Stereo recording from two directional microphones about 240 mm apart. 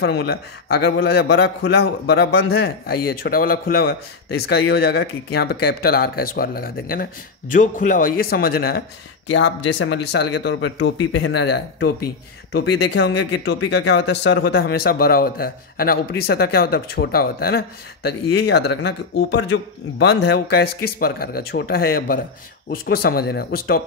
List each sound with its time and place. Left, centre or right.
0.0 s a man's voice: left
9.3 s a man's voice: left